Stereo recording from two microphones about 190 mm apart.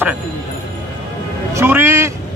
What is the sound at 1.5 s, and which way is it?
Speech, 10° right (ahead or behind).